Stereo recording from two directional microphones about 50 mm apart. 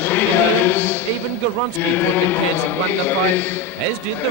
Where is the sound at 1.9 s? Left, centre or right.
Left.